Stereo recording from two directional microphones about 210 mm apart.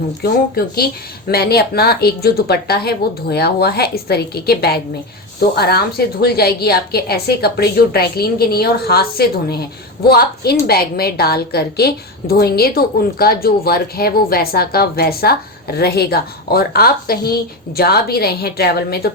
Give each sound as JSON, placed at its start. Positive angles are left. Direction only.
{"t": 0.2, "sound": "a woman's voice", "side_deg": 45}